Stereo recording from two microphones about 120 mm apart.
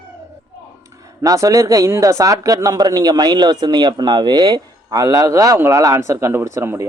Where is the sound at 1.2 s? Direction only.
30° right (ahead or behind).